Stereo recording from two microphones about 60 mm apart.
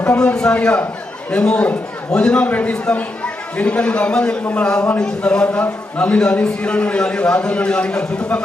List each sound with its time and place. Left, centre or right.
0.0 s a man's voice: left